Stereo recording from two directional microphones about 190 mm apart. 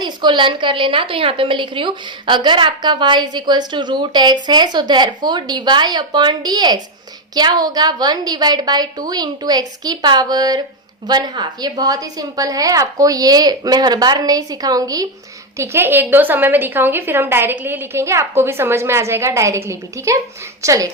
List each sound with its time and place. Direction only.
0.0 s a woman's voice: 25° right (ahead or behind)